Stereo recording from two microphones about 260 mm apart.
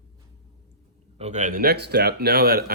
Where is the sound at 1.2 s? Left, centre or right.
Right.